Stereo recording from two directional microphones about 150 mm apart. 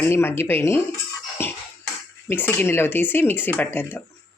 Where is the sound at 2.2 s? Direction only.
15° left (ahead or behind).